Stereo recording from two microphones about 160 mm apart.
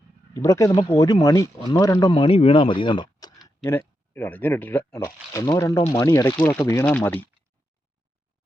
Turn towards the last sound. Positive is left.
turn(degrees=10)  # may be behind; listen again after turning